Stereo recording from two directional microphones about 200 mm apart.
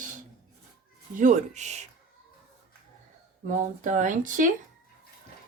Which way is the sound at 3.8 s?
40° right (ahead or behind).